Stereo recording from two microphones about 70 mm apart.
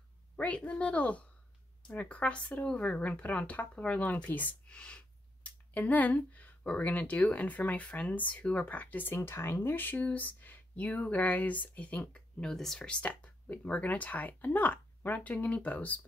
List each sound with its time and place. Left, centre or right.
0.4 s speech: centre
13.0 s speech: left